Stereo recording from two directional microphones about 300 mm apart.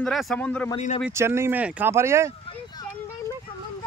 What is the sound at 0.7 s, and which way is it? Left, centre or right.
Speech, left.